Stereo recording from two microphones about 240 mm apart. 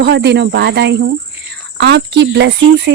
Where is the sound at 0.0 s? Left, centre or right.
Right.